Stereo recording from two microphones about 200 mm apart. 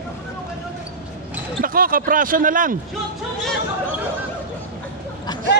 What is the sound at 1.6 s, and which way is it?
Speech, 45° right (ahead or behind).